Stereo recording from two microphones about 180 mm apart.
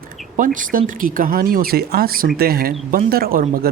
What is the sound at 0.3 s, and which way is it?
Speech, 45° right (ahead or behind).